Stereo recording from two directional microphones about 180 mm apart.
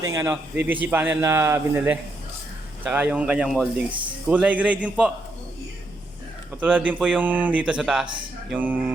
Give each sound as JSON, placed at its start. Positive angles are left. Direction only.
{"t": 0.1, "sound": "speech", "side_deg": -15}
{"t": 6.6, "sound": "speech", "side_deg": -10}